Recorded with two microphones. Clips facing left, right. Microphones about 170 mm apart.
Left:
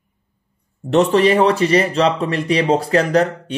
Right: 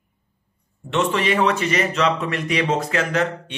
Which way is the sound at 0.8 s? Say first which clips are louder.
Left 8 dB; 35° left (ahead or behind).